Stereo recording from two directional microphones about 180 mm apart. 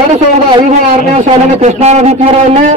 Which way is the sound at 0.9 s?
40° right (ahead or behind).